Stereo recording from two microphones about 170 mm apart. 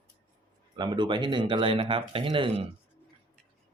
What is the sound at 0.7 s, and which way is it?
Speech, 25° right (ahead or behind).